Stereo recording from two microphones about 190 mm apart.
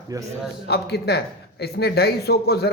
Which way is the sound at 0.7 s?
60° left (ahead or behind).